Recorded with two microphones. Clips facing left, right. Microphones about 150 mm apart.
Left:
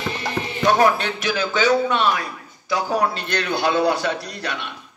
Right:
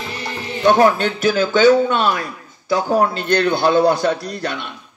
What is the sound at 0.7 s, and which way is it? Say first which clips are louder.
Speech: right 4 dB; 35° right (ahead or behind).